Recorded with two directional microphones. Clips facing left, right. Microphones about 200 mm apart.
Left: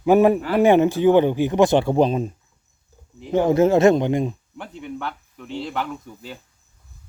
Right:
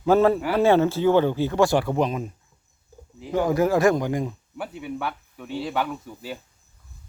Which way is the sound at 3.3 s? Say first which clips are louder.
Left 4 dB; 25° left (ahead or behind).